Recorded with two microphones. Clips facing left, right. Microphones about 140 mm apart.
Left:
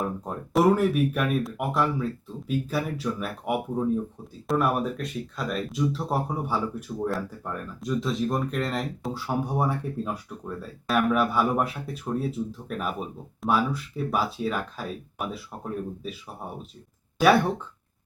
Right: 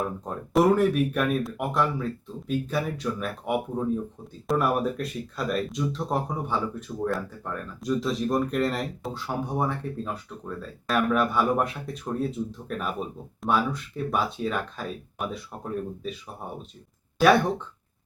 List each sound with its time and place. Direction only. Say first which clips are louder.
0.3 s speech: even; centre (ahead or behind)